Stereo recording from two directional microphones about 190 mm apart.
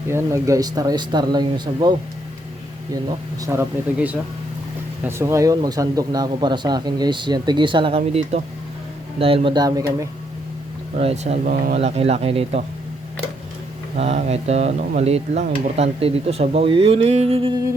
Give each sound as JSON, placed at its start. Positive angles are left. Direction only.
{"t": 0.1, "sound": "speech", "side_deg": -15}
{"t": 10.9, "sound": "speech", "side_deg": -35}
{"t": 11.4, "sound": "speech", "side_deg": -50}
{"t": 11.8, "sound": "speech", "side_deg": -30}
{"t": 13.9, "sound": "speech", "side_deg": -35}